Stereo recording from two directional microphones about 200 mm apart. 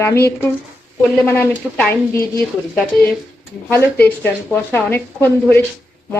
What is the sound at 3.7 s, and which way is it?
Speech, 10° left (ahead or behind).